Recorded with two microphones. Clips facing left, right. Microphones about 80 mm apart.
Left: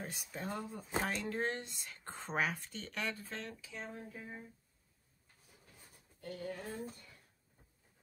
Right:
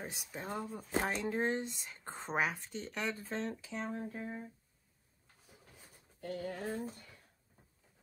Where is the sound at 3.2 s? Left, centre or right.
Right.